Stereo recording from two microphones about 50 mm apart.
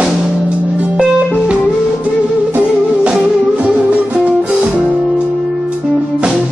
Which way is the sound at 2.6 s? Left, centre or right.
Centre.